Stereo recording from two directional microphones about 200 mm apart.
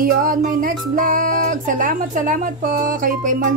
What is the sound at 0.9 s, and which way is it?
Speech, 45° right (ahead or behind).